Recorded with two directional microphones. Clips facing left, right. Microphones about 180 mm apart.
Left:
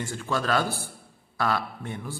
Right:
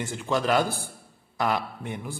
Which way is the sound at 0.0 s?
20° right (ahead or behind).